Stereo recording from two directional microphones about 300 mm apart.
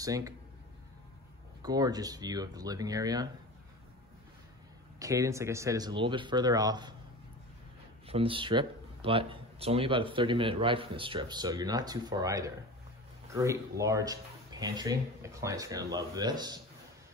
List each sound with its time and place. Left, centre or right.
0.0 s speech: centre
1.6 s speech: centre
4.9 s speech: centre
8.1 s speech: centre